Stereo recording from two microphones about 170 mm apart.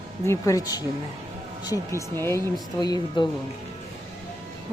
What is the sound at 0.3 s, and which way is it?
Speech, 20° left (ahead or behind).